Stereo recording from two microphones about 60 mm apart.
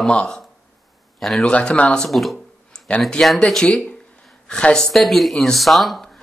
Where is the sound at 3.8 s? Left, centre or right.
Centre.